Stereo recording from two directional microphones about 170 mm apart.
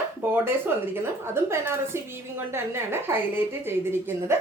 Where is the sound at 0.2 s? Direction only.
10° right (ahead or behind).